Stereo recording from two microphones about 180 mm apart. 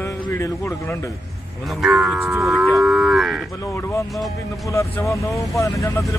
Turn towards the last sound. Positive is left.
turn(degrees=15)  # may be behind; listen again after turning